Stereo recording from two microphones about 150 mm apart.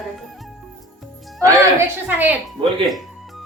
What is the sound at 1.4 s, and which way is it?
Speech, 15° right (ahead or behind).